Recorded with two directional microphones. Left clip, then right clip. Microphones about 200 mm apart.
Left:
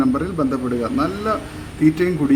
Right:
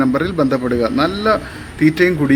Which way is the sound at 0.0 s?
15° right (ahead or behind).